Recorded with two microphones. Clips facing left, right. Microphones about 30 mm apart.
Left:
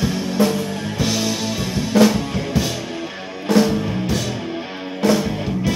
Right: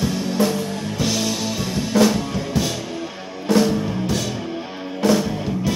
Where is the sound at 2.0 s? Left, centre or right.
Centre.